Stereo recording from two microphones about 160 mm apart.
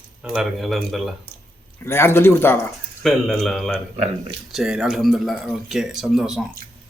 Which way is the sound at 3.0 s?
Centre (ahead or behind).